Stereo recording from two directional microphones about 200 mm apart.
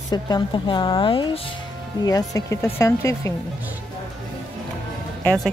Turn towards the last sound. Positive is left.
turn(degrees=5)  # may be behind; listen again after turning